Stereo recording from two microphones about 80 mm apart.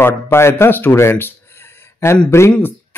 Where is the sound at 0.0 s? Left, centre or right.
Left.